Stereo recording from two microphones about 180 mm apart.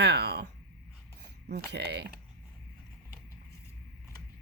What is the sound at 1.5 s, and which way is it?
Speech, 65° right (ahead or behind).